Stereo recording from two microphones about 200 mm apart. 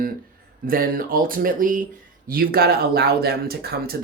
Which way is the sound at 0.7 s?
45° right (ahead or behind).